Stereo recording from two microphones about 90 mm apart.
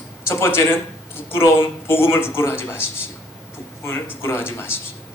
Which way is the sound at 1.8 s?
25° left (ahead or behind).